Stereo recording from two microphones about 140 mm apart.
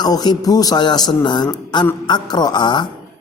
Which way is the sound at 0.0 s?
30° left (ahead or behind).